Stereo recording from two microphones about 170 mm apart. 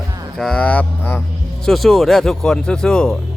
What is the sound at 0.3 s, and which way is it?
Speech, centre (ahead or behind).